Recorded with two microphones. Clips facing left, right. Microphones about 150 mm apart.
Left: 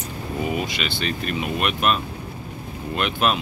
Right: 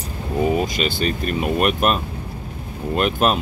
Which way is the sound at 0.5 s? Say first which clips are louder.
Right 5 dB; 40° right (ahead or behind).